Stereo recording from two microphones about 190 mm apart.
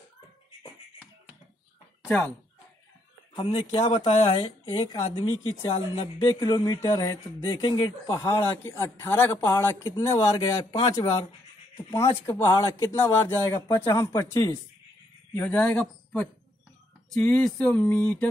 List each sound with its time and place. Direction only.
2.0 s speech: 10° left (ahead or behind)
3.4 s speech: 30° left (ahead or behind)
11.7 s speech: 15° left (ahead or behind)
17.1 s speech: 5° left (ahead or behind)